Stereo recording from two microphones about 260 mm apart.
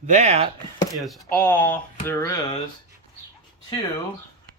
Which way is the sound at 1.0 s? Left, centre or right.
Centre.